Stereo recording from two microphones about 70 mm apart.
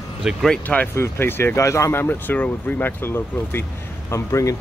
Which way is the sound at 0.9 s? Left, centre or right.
Left.